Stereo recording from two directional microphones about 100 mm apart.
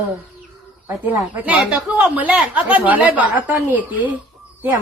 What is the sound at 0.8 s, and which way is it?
Speech, 15° right (ahead or behind).